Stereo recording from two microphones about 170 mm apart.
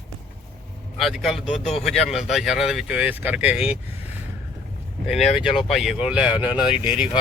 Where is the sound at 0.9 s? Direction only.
Centre (ahead or behind).